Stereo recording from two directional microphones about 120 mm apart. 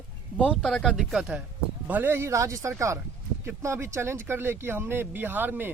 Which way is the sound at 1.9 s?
15° right (ahead or behind).